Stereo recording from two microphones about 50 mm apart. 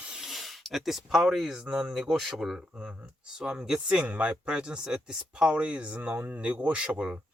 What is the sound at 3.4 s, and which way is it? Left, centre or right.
Speech, centre.